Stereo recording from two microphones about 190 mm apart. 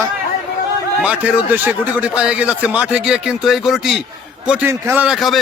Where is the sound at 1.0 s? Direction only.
5° right (ahead or behind).